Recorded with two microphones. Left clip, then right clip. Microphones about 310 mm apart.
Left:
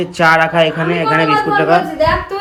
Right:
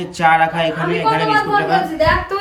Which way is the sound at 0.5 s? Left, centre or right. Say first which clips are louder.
Left 5 dB; centre.